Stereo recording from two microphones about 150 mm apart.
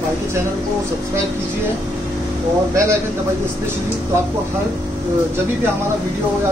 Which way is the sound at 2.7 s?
20° right (ahead or behind).